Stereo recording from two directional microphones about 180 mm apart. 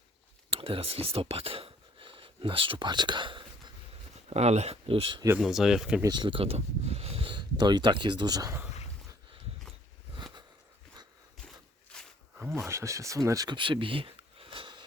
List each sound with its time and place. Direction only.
0.5 s speech: 30° right (ahead or behind)
4.3 s speech: 40° right (ahead or behind)
5.4 s speech: centre (ahead or behind)
6.0 s speech: 25° right (ahead or behind)
11.9 s a sound: 5° left (ahead or behind)
12.4 s a sound: 15° right (ahead or behind)